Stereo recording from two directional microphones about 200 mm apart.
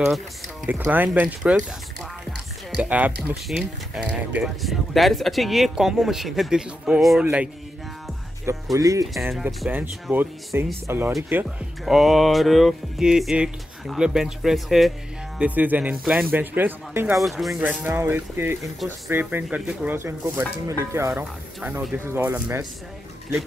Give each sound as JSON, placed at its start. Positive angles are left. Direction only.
{"t": 0.7, "sound": "speech", "side_deg": -10}
{"t": 2.7, "sound": "speech", "side_deg": -5}
{"t": 8.7, "sound": "speech", "side_deg": -15}
{"t": 9.1, "sound": "speech", "side_deg": -5}
{"t": 17.2, "sound": "speech", "side_deg": 0}